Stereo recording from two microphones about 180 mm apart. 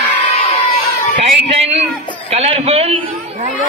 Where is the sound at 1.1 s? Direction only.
35° right (ahead or behind).